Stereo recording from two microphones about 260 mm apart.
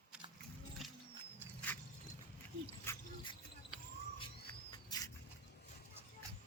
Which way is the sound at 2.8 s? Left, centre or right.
Centre.